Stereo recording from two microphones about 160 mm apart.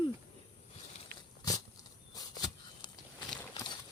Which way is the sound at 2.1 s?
25° left (ahead or behind).